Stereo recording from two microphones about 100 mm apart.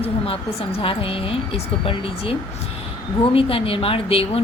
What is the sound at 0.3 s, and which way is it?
A woman's voice, 65° left (ahead or behind).